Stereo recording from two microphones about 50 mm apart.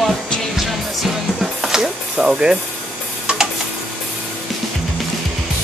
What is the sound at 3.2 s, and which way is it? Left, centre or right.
Tick-tock, centre.